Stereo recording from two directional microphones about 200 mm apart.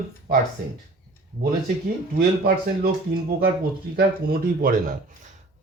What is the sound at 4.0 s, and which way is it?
Speech, 45° right (ahead or behind).